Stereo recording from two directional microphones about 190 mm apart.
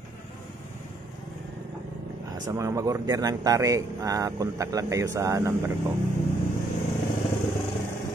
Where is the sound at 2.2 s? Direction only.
20° right (ahead or behind).